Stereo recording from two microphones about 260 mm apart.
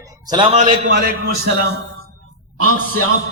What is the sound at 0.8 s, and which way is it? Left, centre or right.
Speech, right.